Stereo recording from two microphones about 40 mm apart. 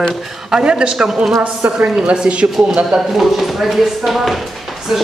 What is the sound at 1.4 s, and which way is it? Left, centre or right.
A woman's voice, right.